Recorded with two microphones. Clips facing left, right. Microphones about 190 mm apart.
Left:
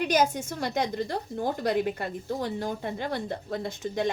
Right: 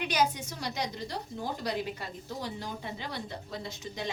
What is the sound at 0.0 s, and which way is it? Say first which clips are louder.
A woman's voice: left 5 dB; 45° left (ahead or behind).